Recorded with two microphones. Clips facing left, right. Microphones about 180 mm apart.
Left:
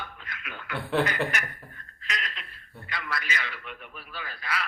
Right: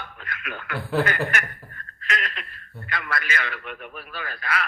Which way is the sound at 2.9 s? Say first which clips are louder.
Right 4 dB; 55° right (ahead or behind).